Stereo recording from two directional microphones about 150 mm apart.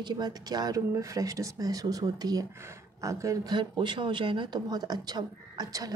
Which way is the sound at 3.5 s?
30° right (ahead or behind).